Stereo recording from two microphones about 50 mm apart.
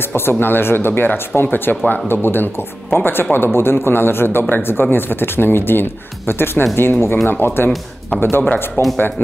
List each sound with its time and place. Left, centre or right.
0.1 s speech: left
3.5 s speech: left